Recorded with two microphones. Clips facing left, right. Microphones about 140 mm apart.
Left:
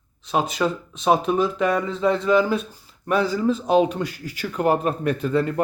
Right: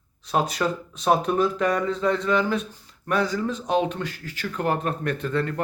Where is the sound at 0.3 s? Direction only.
Centre (ahead or behind).